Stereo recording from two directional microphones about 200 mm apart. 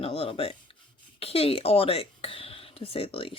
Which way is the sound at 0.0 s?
30° left (ahead or behind).